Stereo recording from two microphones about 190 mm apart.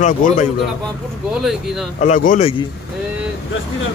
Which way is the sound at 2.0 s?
40° left (ahead or behind).